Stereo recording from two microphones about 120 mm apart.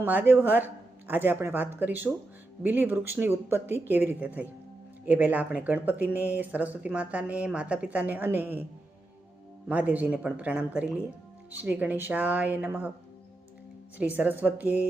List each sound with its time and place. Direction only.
0.0 s speech: 15° right (ahead or behind)
9.6 s speech: 10° right (ahead or behind)
14.0 s speech: 15° right (ahead or behind)